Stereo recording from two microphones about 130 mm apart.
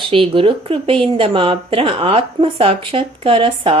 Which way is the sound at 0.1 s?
40° right (ahead or behind).